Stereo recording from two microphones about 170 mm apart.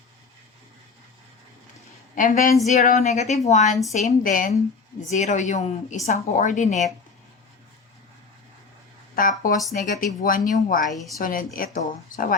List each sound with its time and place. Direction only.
2.1 s speech: 50° left (ahead or behind)
9.2 s speech: 55° left (ahead or behind)